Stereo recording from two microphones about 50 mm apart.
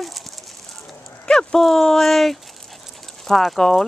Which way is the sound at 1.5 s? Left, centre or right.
Centre.